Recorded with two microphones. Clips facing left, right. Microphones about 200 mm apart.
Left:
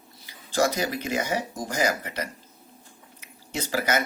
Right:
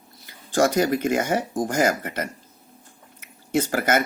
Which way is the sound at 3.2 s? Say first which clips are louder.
Right 10 dB; 50° right (ahead or behind).